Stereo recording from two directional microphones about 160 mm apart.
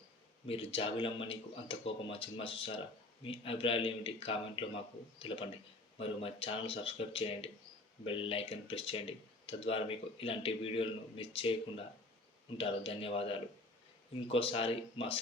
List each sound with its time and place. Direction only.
0.4 s speech: 35° left (ahead or behind)
12.5 s speech: 35° left (ahead or behind)